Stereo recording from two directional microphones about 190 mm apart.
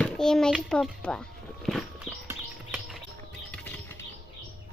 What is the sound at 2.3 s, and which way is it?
Horse, 5° right (ahead or behind).